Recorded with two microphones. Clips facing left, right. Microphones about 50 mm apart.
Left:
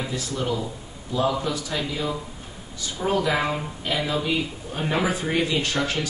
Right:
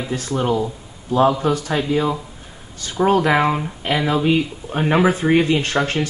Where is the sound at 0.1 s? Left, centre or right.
Right.